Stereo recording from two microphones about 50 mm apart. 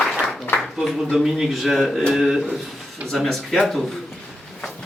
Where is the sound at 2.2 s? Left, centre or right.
Centre.